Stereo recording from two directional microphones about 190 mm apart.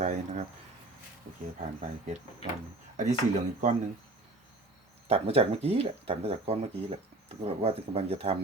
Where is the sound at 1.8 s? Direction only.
40° right (ahead or behind).